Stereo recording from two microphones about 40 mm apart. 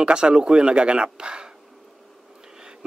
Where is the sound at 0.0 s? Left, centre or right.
Right.